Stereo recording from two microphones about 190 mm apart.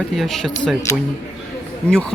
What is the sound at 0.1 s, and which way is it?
Speech, centre (ahead or behind).